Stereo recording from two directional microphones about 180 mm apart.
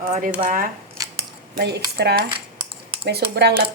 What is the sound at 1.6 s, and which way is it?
A woman's voice, 65° right (ahead or behind).